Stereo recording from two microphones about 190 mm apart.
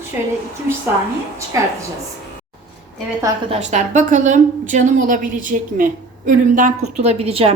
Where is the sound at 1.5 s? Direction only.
15° right (ahead or behind).